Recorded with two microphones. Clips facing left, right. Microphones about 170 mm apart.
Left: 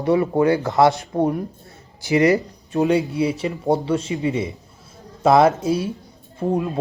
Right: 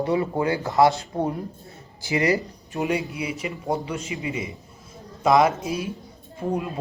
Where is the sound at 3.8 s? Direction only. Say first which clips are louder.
Left 8 dB; 35° left (ahead or behind).